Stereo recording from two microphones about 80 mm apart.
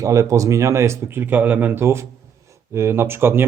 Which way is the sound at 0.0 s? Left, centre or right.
Right.